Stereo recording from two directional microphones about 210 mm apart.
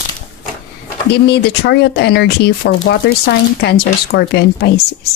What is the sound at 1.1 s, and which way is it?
Speech, 50° left (ahead or behind).